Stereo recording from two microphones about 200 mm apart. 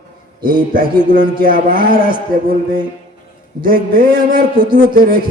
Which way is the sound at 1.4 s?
45° right (ahead or behind).